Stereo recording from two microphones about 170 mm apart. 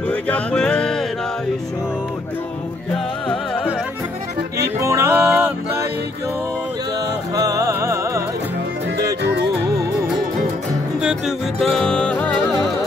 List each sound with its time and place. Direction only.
0.0 s music: 10° left (ahead or behind)
2.9 s music: 10° left (ahead or behind)
4.7 s music: 15° right (ahead or behind)
7.3 s music: 20° right (ahead or behind)
11.0 s music: 5° right (ahead or behind)